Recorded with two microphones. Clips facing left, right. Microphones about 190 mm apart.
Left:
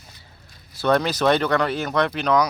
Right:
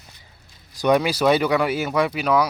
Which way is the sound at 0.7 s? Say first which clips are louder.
Right 1 dB; 10° right (ahead or behind).